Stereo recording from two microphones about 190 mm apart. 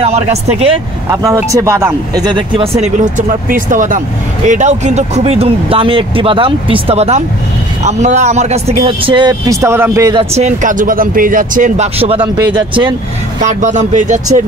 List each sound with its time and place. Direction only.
0.0 s speech: 35° right (ahead or behind)
1.1 s speech: 15° right (ahead or behind)
10.3 s speech: 40° right (ahead or behind)
13.4 s speech: 40° right (ahead or behind)